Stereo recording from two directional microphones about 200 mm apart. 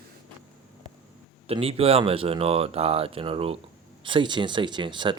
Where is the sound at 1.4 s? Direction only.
30° right (ahead or behind).